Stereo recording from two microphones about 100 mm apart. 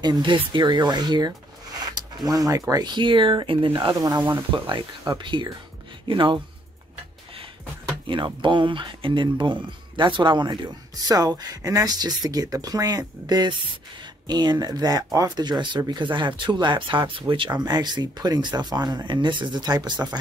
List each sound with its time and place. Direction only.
0.0 s speech: 50° right (ahead or behind)
2.9 s speech: 55° right (ahead or behind)
4.0 s speech: 40° right (ahead or behind)
5.1 s speech: 55° right (ahead or behind)
8.1 s speech: 55° right (ahead or behind)